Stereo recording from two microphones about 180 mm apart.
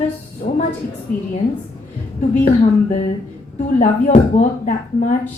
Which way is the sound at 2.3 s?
45° left (ahead or behind).